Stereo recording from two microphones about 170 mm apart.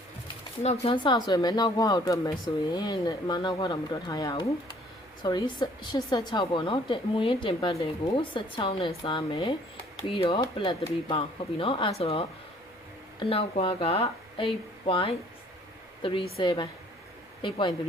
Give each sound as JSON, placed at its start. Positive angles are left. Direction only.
{"t": 0.9, "sound": "a woman's voice", "side_deg": 25}